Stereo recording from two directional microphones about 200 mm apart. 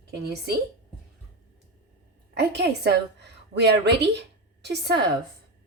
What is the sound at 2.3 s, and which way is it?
A woman's voice, 55° right (ahead or behind).